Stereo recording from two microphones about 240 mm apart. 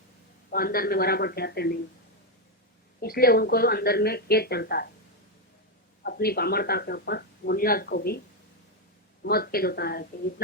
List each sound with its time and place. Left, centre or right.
0.5 s speech: left
3.0 s speech: left
6.1 s speech: left
9.2 s speech: left